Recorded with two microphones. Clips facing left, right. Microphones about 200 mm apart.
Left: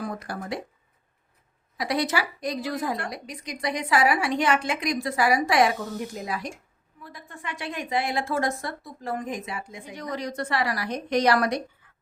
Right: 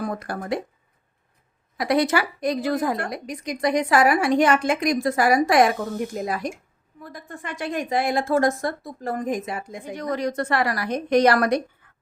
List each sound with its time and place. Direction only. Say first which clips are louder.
0.0 s speech: right 4 dB; 50° right (ahead or behind)
1.8 s a woman's voice: right 5 dB; 55° right (ahead or behind)
11.8 s beatboxing: right 2 dB; 55° right (ahead or behind)